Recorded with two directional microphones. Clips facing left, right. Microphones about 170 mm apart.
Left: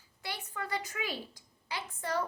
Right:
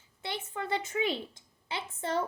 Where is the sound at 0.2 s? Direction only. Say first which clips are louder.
Right 4 dB; 25° right (ahead or behind).